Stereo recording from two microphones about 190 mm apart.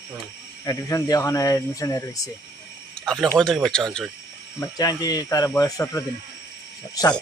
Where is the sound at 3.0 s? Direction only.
5° left (ahead or behind).